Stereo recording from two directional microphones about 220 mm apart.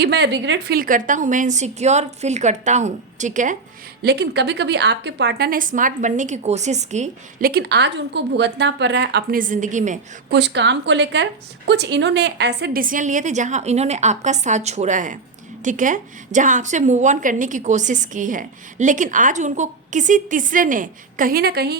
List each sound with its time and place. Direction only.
0.0 s a woman's voice: 50° right (ahead or behind); by 3.6 s 35° right (ahead or behind)
4.0 s a woman's voice: 50° right (ahead or behind)
10.3 s a woman's voice: 50° right (ahead or behind)